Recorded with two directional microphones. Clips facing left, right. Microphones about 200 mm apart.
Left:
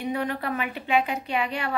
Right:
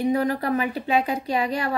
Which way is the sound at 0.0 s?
40° right (ahead or behind).